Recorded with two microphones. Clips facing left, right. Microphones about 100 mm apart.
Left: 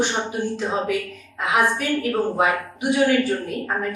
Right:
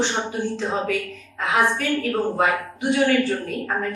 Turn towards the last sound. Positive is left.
turn(degrees=5)  # may be behind; listen again after turning